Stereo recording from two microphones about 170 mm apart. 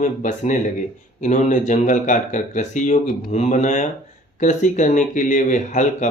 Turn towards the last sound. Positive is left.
turn(degrees=45)  # may be behind; listen again after turning